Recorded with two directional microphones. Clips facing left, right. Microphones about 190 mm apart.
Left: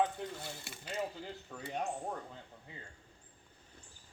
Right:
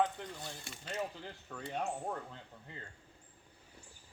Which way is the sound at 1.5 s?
15° left (ahead or behind).